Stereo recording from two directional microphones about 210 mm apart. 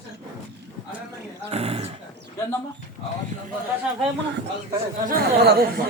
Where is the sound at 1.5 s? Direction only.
30° right (ahead or behind).